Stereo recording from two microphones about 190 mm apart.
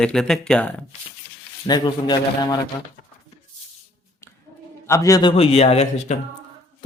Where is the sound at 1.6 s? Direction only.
20° left (ahead or behind).